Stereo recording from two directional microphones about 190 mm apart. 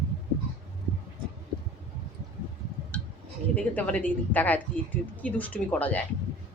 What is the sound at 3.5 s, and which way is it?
A woman's voice, 5° left (ahead or behind).